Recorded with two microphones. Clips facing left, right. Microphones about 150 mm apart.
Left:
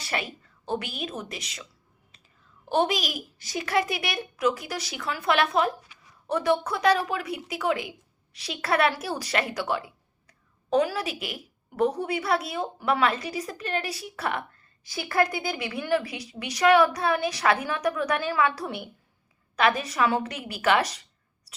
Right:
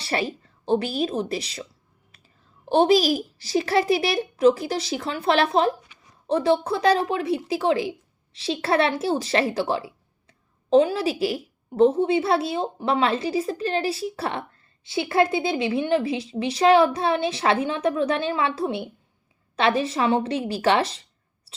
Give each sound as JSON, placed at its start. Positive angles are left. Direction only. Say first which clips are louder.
{"t": 0.0, "sound": "a child's voice", "louder": "right 6 dB", "side_deg": -30}
{"t": 2.6, "sound": "a child's voice", "louder": "right 7 dB", "side_deg": -30}